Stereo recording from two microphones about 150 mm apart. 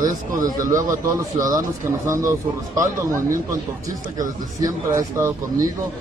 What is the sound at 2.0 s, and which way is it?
Speech, 20° right (ahead or behind).